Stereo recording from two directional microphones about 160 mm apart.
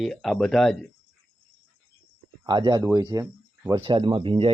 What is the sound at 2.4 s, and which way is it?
Speech, 30° right (ahead or behind).